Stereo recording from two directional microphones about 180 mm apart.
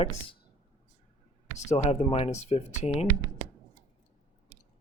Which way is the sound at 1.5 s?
40° left (ahead or behind).